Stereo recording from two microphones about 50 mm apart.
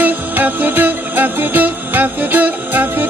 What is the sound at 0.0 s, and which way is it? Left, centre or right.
Music, right.